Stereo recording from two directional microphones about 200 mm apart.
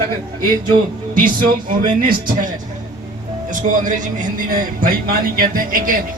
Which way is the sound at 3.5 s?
40° right (ahead or behind).